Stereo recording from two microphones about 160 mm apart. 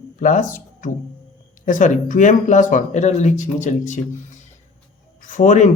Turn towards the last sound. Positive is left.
turn(degrees=50)  # may be behind; listen again after turning